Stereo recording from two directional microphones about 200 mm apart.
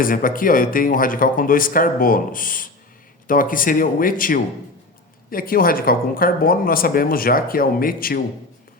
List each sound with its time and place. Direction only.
0.0 s speech: 45° left (ahead or behind)